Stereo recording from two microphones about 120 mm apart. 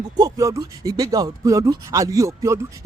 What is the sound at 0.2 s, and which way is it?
Speech, 30° right (ahead or behind).